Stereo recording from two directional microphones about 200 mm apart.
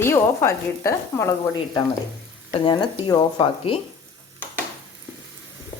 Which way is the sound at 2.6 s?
25° left (ahead or behind).